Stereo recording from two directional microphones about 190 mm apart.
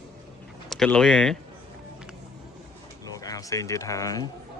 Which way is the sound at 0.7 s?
5° left (ahead or behind).